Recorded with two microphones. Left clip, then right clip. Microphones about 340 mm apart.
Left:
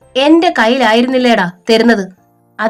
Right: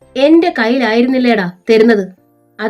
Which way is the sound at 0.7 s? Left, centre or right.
Left.